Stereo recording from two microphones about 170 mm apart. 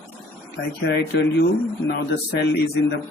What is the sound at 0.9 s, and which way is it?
Speech, 75° left (ahead or behind).